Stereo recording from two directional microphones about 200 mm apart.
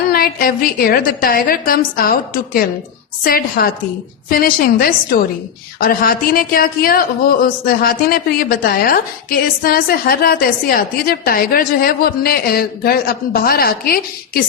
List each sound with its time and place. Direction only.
0.1 s speech: 45° left (ahead or behind)